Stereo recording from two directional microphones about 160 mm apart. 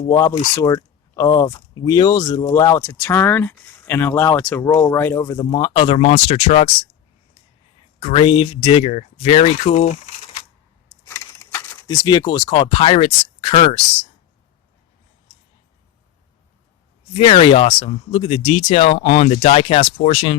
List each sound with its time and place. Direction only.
0.1 s speech: 20° left (ahead or behind)
2.8 s speech: 10° left (ahead or behind); by 6.7 s 40° left (ahead or behind)
7.9 s speech: 35° left (ahead or behind)
11.1 s speech: 15° left (ahead or behind); by 13.8 s 40° left (ahead or behind)
17.2 s speech: 35° left (ahead or behind)